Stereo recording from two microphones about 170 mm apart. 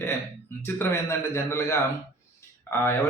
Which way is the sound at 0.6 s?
15° left (ahead or behind).